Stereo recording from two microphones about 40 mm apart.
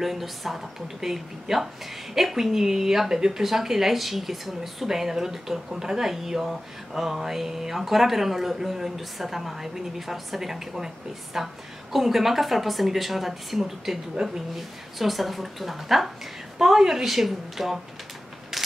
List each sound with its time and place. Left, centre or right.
0.0 s a woman's voice: centre
15.0 s a woman's voice: centre